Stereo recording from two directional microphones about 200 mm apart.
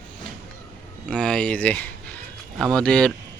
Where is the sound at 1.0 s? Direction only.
5° left (ahead or behind).